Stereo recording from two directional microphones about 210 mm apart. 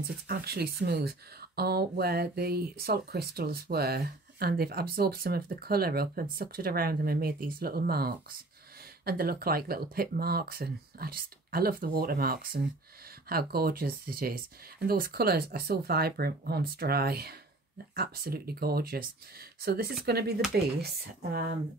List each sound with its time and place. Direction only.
0.3 s speech: 50° right (ahead or behind)